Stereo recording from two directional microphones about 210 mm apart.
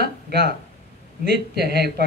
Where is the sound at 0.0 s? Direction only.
50° right (ahead or behind).